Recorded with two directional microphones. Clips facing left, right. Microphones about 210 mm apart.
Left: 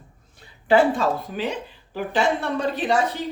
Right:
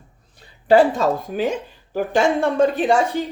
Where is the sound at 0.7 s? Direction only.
45° right (ahead or behind).